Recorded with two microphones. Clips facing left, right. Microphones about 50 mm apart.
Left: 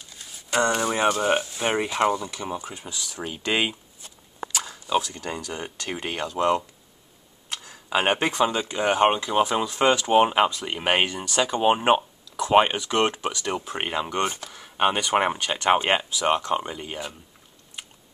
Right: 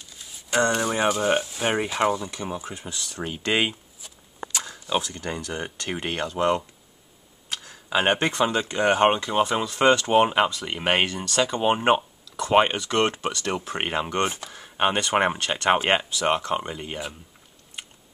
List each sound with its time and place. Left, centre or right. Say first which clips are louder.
0.5 s speech: even; centre
2.8 s speech: right 1 dB; centre
3.5 s a sound: right 1 dB; centre
4.9 s speech: left 2 dB; right
6.3 s speech: left 1 dB; centre
7.6 s a sound: right 1 dB; centre
8.3 s speech: left 1 dB; centre
8.7 s speech: right 1 dB; centre
13.7 s speech: right 1 dB; centre
14.9 s speech: even; centre